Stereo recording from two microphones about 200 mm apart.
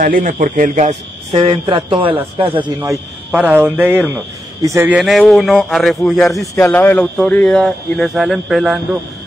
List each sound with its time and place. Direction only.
0.0 s a man's voice: 45° right (ahead or behind); by 2.9 s 25° right (ahead or behind)
2.9 s a man's voice: 5° right (ahead or behind)
6.4 s speech: 15° left (ahead or behind)